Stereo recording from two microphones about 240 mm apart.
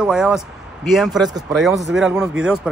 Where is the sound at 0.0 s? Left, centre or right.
Centre.